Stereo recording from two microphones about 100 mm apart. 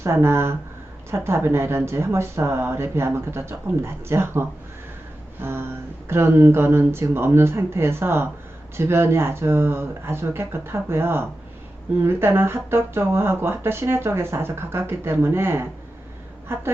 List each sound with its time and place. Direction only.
0.0 s speech: 25° right (ahead or behind)
5.4 s a sound: 25° right (ahead or behind)
6.1 s speech: 25° right (ahead or behind)